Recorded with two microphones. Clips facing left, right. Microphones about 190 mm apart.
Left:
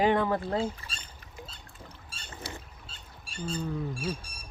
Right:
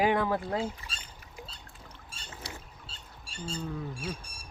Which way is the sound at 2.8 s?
30° right (ahead or behind).